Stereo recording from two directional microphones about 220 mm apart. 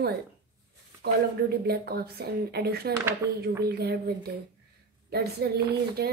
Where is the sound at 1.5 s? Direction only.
45° right (ahead or behind).